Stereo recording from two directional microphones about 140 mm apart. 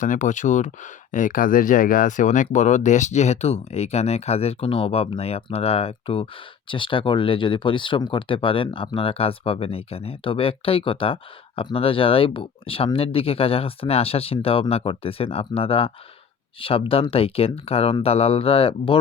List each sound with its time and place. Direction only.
0.0 s speech: 65° left (ahead or behind); by 18.9 s 45° left (ahead or behind)